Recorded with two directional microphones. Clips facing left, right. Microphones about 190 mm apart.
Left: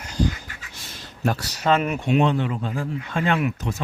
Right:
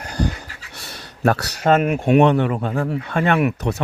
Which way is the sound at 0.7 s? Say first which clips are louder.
Right 4 dB; 65° right (ahead or behind).